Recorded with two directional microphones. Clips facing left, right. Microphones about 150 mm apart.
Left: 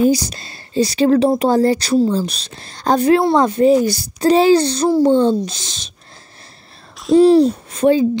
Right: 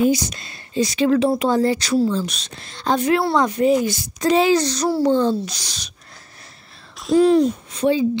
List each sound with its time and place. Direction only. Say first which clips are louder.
0.0 s a woman's voice: left 3 dB; 35° left (ahead or behind)
7.2 s a woman's voice: left 4 dB; 30° left (ahead or behind)
7.7 s a woman's voice: left 5 dB; 50° left (ahead or behind)